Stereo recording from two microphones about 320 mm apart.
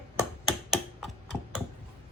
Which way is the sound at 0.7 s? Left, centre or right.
Centre.